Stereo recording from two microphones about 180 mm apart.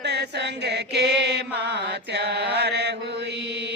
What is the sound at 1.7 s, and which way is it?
Mantra, 75° right (ahead or behind).